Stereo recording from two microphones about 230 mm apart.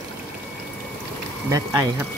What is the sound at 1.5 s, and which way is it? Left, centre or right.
Speech, centre.